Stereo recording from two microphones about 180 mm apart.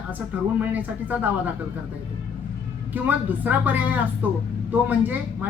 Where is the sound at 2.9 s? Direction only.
10° right (ahead or behind).